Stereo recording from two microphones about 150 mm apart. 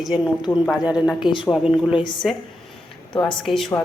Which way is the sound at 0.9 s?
5° right (ahead or behind).